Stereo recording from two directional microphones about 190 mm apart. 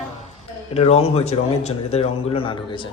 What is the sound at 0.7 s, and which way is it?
Speech, 35° left (ahead or behind).